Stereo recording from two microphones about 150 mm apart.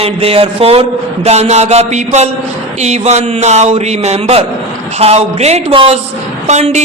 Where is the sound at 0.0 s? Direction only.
40° right (ahead or behind).